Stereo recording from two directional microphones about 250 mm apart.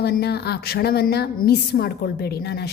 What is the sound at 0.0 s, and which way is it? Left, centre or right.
Speech, left.